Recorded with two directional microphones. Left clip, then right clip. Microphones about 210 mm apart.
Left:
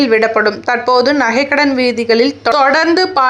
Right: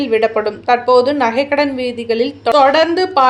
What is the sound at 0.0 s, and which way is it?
A woman's voice, 15° left (ahead or behind).